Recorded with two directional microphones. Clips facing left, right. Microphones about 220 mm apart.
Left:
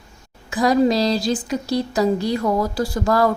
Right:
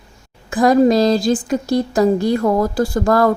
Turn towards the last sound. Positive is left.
turn(degrees=-50)  # may be behind; listen again after turning